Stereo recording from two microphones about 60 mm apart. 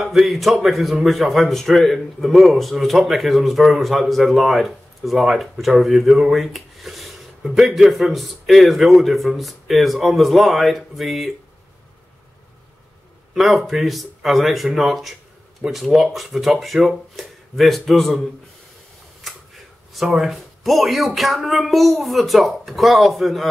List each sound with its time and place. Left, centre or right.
0.0 s a man's voice: centre
13.3 s a man's voice: centre
19.2 s a sound: centre
20.2 s a man's voice: centre